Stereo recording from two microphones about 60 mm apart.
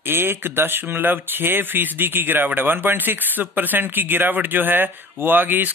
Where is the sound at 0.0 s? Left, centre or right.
Right.